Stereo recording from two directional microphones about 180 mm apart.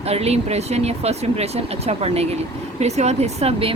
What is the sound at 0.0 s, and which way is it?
Speech, 35° right (ahead or behind).